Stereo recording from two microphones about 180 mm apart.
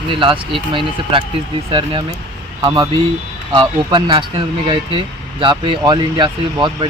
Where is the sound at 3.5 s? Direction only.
25° right (ahead or behind).